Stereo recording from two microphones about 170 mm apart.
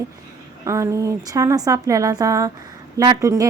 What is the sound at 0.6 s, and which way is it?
A woman's voice, 15° right (ahead or behind).